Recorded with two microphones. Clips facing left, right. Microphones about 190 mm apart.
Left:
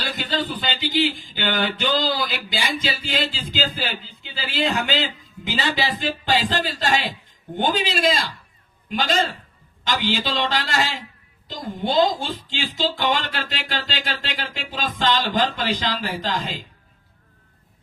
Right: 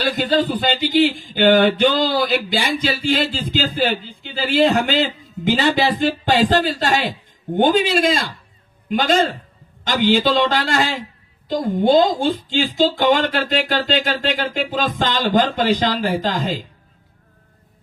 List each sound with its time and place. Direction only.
0.0 s speech: 50° right (ahead or behind)